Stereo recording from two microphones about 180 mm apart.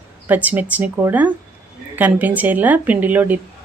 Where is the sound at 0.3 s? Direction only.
10° right (ahead or behind).